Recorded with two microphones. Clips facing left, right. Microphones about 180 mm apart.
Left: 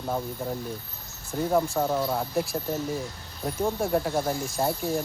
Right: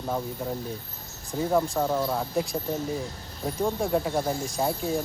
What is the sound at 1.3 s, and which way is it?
Speech, centre (ahead or behind).